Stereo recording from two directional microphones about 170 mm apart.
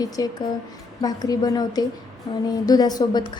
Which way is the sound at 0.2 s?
20° left (ahead or behind).